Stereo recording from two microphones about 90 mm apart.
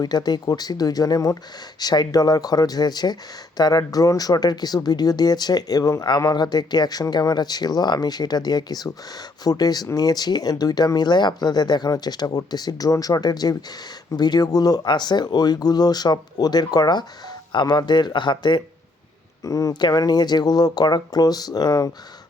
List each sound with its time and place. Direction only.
0.0 s speech: 50° left (ahead or behind)
19.5 s speech: 40° left (ahead or behind)
19.8 s speech: 50° left (ahead or behind)